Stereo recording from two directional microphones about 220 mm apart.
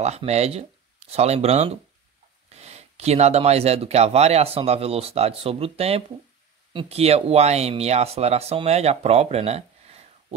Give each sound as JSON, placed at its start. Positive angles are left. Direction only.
{"t": 0.0, "sound": "speech", "side_deg": -30}